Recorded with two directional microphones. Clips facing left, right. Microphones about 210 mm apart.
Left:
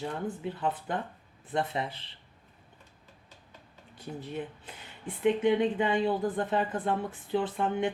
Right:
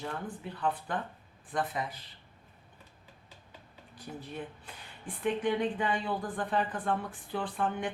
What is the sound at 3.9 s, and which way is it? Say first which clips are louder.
Speech: left 4 dB; 25° left (ahead or behind).